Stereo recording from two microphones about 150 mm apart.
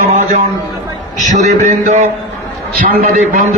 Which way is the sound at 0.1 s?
45° right (ahead or behind).